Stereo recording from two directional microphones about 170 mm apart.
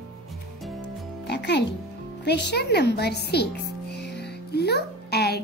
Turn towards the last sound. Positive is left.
turn(degrees=70)  # may be behind; listen again after turning